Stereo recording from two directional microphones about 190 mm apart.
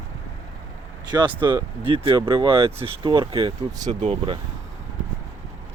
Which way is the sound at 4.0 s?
35° right (ahead or behind).